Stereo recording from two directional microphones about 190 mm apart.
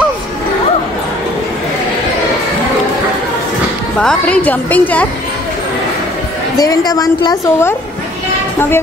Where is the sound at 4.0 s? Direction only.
5° left (ahead or behind).